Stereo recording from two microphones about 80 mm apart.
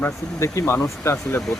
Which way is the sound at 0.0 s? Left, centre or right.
Left.